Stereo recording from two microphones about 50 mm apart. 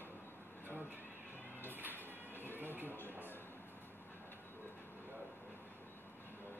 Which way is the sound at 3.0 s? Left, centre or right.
Left.